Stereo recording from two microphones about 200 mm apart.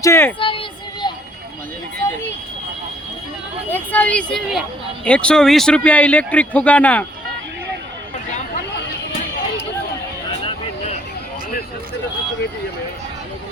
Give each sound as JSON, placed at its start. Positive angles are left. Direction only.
{"t": 0.0, "sound": "a man's voice", "side_deg": 15}
{"t": 0.3, "sound": "child singing", "side_deg": 25}
{"t": 1.0, "sound": "a sound", "side_deg": 20}
{"t": 2.0, "sound": "speech", "side_deg": 15}
{"t": 3.7, "sound": "a man's voice", "side_deg": 10}
{"t": 8.3, "sound": "a sound", "side_deg": 40}